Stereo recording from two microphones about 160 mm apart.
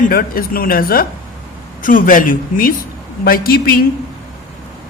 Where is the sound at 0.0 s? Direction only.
65° left (ahead or behind).